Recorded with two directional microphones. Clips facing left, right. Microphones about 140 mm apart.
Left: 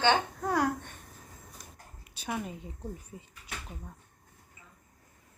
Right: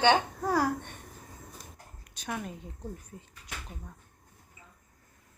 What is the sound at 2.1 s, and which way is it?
Speech, 5° left (ahead or behind).